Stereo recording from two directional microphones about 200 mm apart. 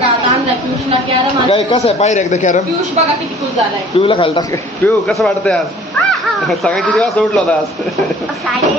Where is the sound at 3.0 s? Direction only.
35° right (ahead or behind).